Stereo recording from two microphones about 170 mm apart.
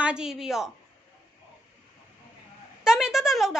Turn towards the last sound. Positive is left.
turn(degrees=0)  # may be behind; listen again after turning